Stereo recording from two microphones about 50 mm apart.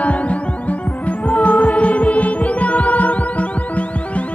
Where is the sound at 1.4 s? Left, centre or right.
Left.